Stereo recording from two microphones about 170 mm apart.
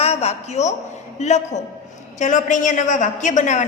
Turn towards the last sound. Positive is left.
turn(degrees=45)  # may be behind; listen again after turning